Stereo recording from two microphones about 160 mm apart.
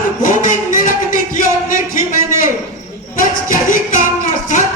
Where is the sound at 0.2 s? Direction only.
55° left (ahead or behind).